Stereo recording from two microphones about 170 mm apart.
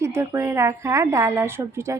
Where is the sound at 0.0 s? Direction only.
15° right (ahead or behind).